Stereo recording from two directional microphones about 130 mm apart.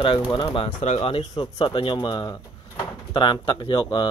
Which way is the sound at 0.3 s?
40° left (ahead or behind).